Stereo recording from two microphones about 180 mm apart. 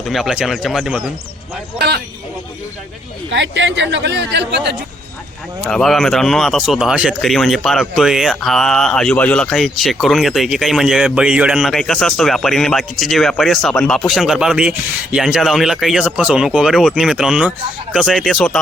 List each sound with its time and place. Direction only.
0.0 s speech: centre (ahead or behind)
3.2 s speech: 80° right
5.6 s speech: centre (ahead or behind)